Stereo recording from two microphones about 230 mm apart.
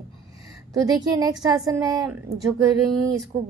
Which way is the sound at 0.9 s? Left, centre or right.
Centre.